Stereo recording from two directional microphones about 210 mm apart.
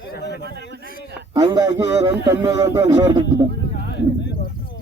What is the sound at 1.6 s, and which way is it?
Speech, 55° left (ahead or behind).